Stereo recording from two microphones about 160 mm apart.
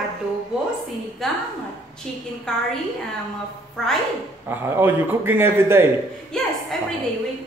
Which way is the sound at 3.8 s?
5° left (ahead or behind).